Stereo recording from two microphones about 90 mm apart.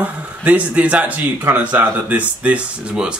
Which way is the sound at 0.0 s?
15° right (ahead or behind).